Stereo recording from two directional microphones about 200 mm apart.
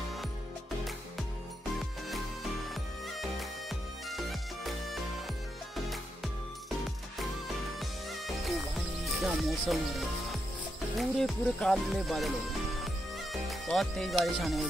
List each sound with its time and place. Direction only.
2.7 s music: centre (ahead or behind)
7.8 s music: centre (ahead or behind)
11.0 s speech: 5° left (ahead or behind)
12.8 s music: centre (ahead or behind)
14.2 s speech: centre (ahead or behind)